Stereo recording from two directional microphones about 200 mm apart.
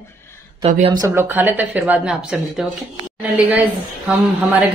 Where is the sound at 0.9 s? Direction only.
15° right (ahead or behind).